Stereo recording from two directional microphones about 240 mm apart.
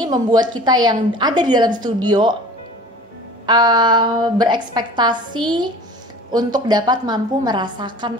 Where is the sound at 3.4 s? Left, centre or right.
Centre.